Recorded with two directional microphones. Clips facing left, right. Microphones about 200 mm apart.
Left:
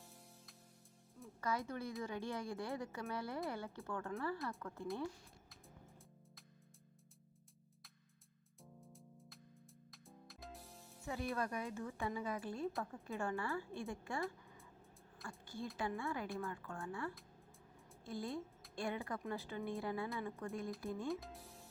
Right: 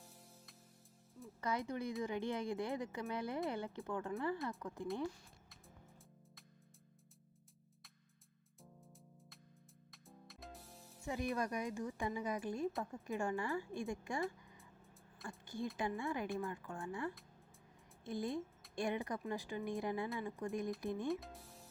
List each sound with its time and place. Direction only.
1.4 s speech: 20° right (ahead or behind)
8.8 s music: centre (ahead or behind)
11.0 s music: 15° right (ahead or behind)
11.3 s speech: 15° right (ahead or behind)
15.3 s speech: 20° right (ahead or behind)
21.1 s speech: centre (ahead or behind)